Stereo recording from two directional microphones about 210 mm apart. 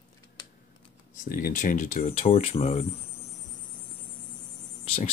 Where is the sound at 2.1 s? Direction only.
25° left (ahead or behind).